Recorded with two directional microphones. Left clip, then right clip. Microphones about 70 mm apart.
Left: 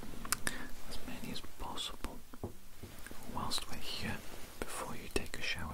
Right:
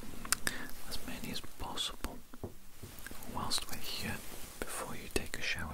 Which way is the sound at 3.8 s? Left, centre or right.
Centre.